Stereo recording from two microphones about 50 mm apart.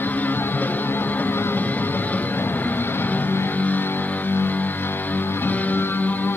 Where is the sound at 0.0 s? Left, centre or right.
Left.